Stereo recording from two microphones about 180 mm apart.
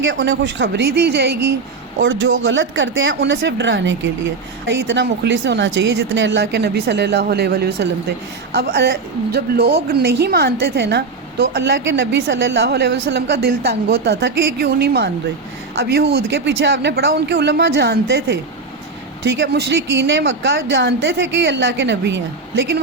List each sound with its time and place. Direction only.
0.0 s a woman's voice: 85° right; by 1.4 s 65° right (ahead or behind)
2.0 s speech: 90° right
4.7 s a woman's voice: 80° right